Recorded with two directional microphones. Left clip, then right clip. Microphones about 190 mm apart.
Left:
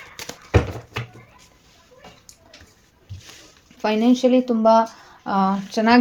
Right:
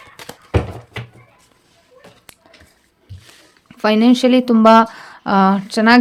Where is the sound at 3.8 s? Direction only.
30° right (ahead or behind).